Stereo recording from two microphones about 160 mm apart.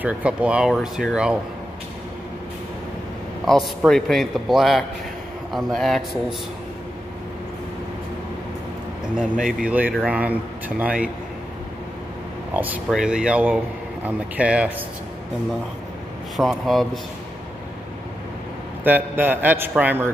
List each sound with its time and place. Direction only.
0.0 s speech: 10° right (ahead or behind)
3.4 s speech: centre (ahead or behind)
9.2 s speech: 5° right (ahead or behind)
12.5 s speech: 10° right (ahead or behind)
16.3 s speech: centre (ahead or behind)
18.9 s speech: 10° right (ahead or behind)